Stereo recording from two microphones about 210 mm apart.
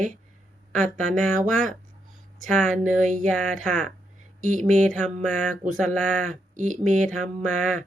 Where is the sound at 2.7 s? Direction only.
35° right (ahead or behind).